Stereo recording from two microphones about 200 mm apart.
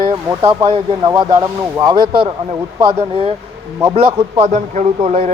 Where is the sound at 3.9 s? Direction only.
30° right (ahead or behind).